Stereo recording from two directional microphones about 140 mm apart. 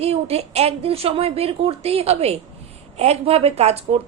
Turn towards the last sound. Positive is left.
turn(degrees=-45)  # may be behind; listen again after turning